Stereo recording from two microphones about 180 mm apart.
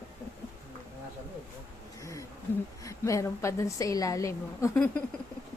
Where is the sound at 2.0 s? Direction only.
15° left (ahead or behind).